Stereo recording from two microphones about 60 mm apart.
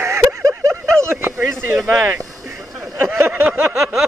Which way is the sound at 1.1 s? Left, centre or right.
Right.